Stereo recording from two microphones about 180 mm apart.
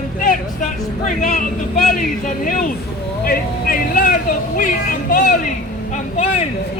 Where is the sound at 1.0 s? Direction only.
50° left (ahead or behind).